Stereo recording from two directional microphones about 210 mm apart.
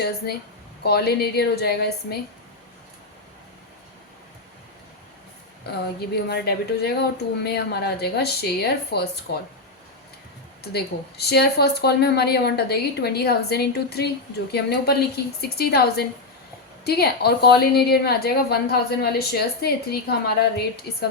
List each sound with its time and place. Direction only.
0.9 s a woman's voice: 50° left (ahead or behind)
6.2 s a woman's voice: 50° left (ahead or behind)
10.6 s a woman's voice: 50° left (ahead or behind)